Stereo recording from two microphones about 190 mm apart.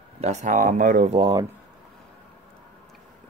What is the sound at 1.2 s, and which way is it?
Speech, 20° right (ahead or behind).